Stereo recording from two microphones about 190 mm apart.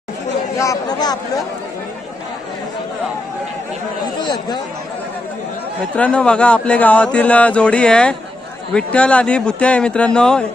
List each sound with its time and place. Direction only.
0.6 s speech: 20° left (ahead or behind)
4.2 s speech: 25° left (ahead or behind)
5.9 s speech: 5° left (ahead or behind)